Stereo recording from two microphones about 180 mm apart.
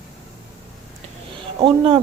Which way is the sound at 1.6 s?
30° right (ahead or behind).